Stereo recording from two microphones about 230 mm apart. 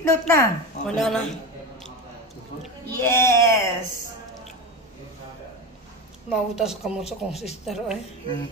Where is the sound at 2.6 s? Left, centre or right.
Centre.